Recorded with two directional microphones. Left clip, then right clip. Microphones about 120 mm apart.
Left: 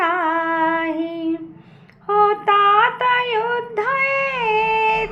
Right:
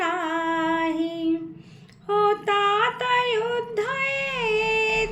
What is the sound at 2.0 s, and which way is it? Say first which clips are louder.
Female singing: left 6 dB; 15° right (ahead or behind).